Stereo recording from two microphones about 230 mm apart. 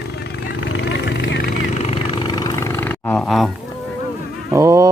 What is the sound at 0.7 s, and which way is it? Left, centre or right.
Vehicle, left.